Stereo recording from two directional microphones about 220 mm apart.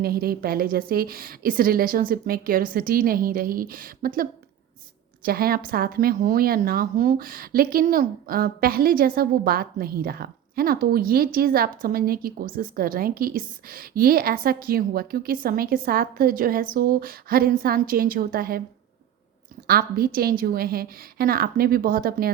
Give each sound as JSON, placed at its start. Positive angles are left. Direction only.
{"t": 0.0, "sound": "speech", "side_deg": -45}
{"t": 19.6, "sound": "a woman's voice", "side_deg": -45}